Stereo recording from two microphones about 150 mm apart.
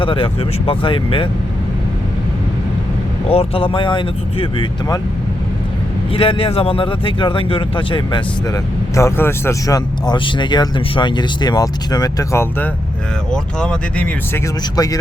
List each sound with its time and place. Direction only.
0.0 s speech: 35° left (ahead or behind)
3.2 s speech: 40° left (ahead or behind)
6.1 s speech: 35° left (ahead or behind)
9.0 s speech: 15° left (ahead or behind)
13.3 s speech: 5° left (ahead or behind)
14.8 s speech: 25° left (ahead or behind)